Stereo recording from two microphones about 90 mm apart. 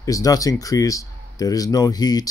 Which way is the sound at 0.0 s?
40° left (ahead or behind).